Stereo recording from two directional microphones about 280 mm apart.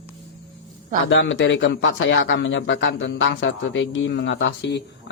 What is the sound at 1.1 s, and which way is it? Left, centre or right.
A man's voice, left.